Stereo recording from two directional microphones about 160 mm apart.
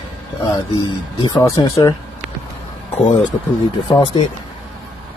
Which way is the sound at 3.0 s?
30° left (ahead or behind).